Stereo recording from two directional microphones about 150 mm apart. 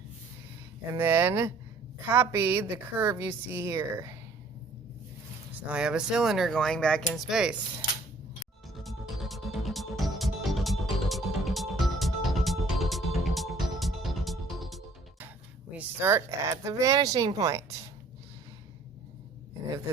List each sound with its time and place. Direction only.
0.9 s a woman's voice: 15° right (ahead or behind)
5.6 s speech: 5° right (ahead or behind)
8.8 s music: centre (ahead or behind)
15.7 s speech: 15° right (ahead or behind)